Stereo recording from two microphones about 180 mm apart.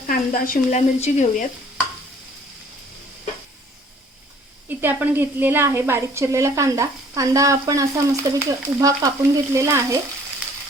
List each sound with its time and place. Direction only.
0.1 s speech: 50° left (ahead or behind)
4.8 s a woman's voice: 10° right (ahead or behind)